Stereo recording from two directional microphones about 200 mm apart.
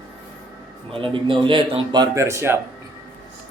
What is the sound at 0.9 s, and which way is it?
Speech, 25° right (ahead or behind).